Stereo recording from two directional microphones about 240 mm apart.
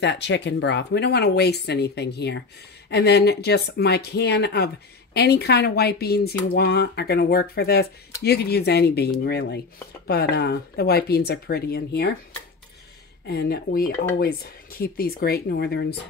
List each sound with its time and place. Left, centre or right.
0.0 s speech: left
13.3 s speech: left